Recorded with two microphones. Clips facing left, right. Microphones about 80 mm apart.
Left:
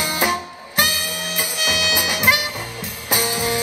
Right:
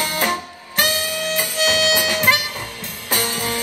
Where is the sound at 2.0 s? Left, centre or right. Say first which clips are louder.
Right 1 dB; centre.